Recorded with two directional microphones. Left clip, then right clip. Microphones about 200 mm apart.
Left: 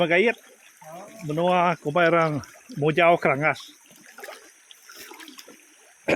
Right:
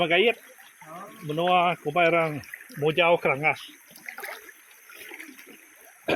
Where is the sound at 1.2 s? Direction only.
45° left (ahead or behind).